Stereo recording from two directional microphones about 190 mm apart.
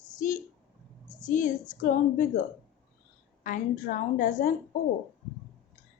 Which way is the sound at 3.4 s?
45° left (ahead or behind).